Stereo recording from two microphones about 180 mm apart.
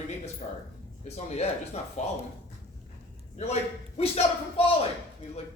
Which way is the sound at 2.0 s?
40° left (ahead or behind).